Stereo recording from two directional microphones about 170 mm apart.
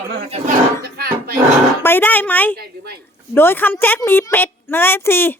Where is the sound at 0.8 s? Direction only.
60° right (ahead or behind).